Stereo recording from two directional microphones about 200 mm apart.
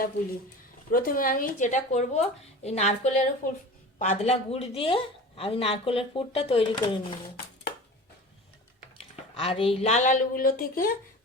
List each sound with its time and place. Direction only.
0.9 s a woman's voice: 45° left (ahead or behind); by 7.2 s 25° left (ahead or behind)
9.0 s speech: 30° left (ahead or behind); by 10.9 s 45° left (ahead or behind)